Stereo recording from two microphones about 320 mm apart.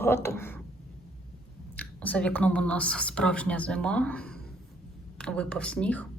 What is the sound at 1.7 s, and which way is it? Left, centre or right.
Speech, centre.